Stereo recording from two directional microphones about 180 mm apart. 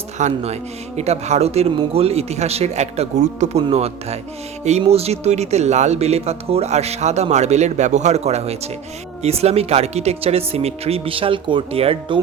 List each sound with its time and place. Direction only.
0.2 s speech: 40° right (ahead or behind)